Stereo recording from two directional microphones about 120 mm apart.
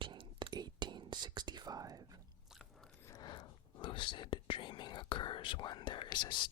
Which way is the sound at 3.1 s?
35° left (ahead or behind).